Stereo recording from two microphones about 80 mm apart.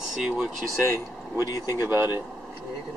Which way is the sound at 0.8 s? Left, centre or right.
Right.